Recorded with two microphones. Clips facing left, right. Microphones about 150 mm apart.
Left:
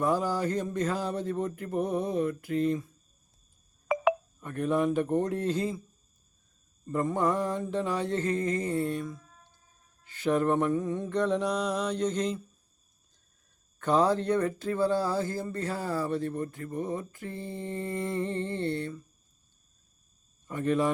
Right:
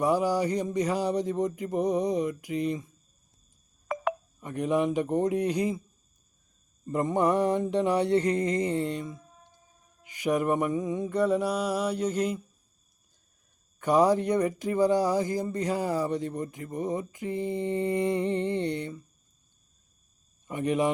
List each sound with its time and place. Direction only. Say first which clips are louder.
0.0 s speech: right 3 dB; 15° right (ahead or behind)
3.8 s telephone dialing: left 5 dB; 5° left (ahead or behind)
4.4 s speech: right 1 dB; 15° right (ahead or behind)
6.8 s speech: right 2 dB; 15° right (ahead or behind)
13.7 s speech: right 3 dB; 10° right (ahead or behind)
20.5 s speech: right 1 dB; 15° right (ahead or behind)